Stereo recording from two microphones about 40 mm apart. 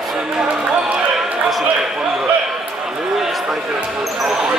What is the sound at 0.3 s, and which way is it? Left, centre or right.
Speech, centre.